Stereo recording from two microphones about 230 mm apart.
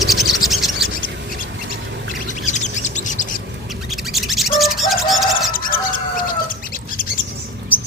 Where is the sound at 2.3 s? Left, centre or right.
Left.